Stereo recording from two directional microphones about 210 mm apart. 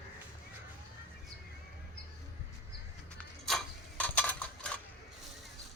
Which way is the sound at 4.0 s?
5° left (ahead or behind).